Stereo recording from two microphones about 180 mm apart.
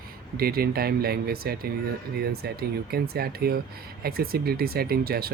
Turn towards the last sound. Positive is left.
turn(degrees=-55)  # may be behind; listen again after turning